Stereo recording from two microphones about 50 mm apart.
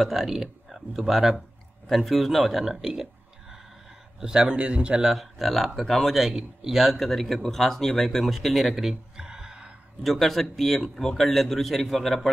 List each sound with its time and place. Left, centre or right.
0.0 s a man's voice: centre; by 5.0 s right
5.0 s a man's voice: centre
10.0 s a man's voice: centre